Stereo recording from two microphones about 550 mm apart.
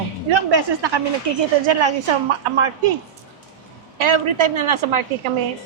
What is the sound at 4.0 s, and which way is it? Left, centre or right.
A woman's voice, right.